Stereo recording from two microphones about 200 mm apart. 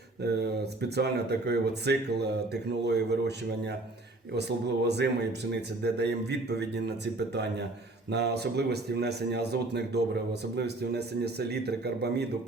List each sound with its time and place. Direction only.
0.2 s speech: 55° right (ahead or behind)